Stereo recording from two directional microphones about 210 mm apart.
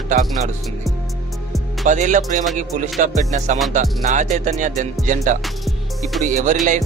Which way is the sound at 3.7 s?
35° right (ahead or behind).